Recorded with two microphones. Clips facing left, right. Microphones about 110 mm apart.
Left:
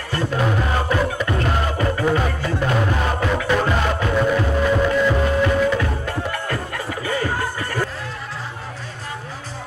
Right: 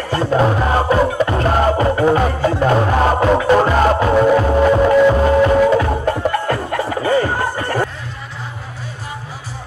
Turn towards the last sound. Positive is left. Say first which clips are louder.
# right 5 dB
turn(degrees=-40)  # may be behind; listen again after turning